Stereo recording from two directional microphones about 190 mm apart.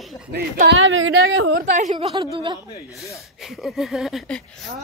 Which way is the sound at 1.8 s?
35° right (ahead or behind).